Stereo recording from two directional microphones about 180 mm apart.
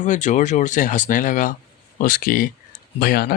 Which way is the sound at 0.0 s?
45° left (ahead or behind).